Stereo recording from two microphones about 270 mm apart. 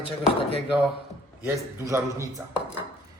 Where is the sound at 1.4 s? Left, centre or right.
Centre.